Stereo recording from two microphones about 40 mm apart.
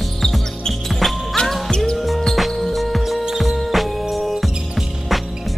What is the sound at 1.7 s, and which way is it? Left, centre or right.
Music, centre.